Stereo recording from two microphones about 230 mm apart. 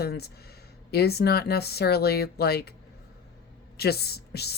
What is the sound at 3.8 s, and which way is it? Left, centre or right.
Speech, left.